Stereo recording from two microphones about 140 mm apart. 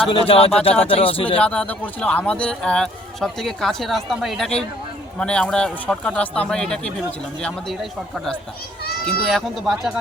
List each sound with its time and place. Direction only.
0.0 s speech: 40° left (ahead or behind)
1.4 s speech: 10° left (ahead or behind)